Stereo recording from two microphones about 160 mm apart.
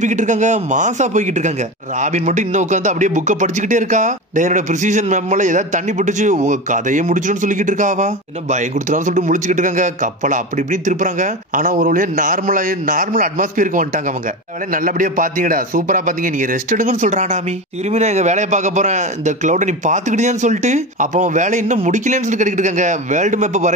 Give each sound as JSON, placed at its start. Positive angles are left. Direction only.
{"t": 0.0, "sound": "a man's voice", "side_deg": -50}